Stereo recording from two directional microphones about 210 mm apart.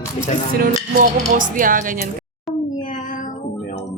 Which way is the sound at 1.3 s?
40° right (ahead or behind).